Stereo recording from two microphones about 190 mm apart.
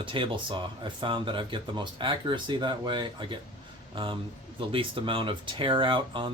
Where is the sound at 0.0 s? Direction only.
25° right (ahead or behind).